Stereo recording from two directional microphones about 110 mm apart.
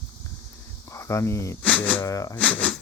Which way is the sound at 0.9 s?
25° left (ahead or behind).